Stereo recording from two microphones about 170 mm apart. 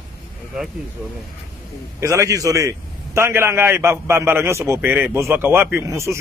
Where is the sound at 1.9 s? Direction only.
15° right (ahead or behind).